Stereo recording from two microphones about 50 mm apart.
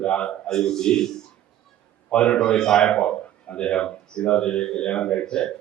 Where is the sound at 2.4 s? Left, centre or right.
Centre.